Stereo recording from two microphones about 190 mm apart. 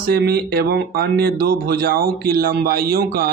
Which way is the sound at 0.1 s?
55° right (ahead or behind).